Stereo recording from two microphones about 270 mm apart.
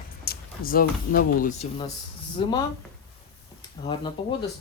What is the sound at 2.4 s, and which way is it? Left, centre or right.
Speech, centre.